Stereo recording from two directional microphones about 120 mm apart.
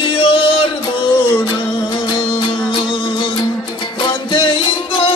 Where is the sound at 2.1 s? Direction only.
40° left (ahead or behind).